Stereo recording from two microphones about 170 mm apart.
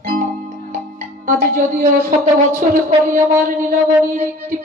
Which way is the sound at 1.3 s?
55° right (ahead or behind).